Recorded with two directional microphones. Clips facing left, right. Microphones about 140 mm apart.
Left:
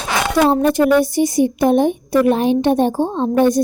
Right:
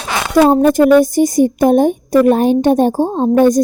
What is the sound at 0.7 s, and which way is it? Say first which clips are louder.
A woman's voice: right 5 dB; 45° right (ahead or behind).